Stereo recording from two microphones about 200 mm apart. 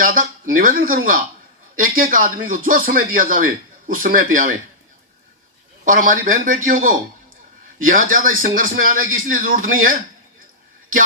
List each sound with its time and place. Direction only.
0.0 s speech: 45° right (ahead or behind)
1.8 s speech: 45° right (ahead or behind)
5.8 s a man's voice: 40° right (ahead or behind)